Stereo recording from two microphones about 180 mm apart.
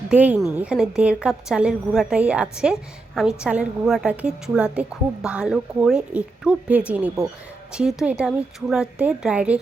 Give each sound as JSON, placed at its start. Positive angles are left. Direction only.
{"t": 0.1, "sound": "a woman's voice", "side_deg": -5}